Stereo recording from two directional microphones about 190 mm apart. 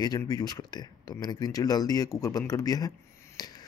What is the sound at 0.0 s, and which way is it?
A man's voice, 20° left (ahead or behind).